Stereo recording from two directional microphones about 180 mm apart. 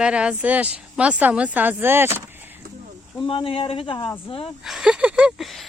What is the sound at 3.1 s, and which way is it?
Speech, 30° left (ahead or behind).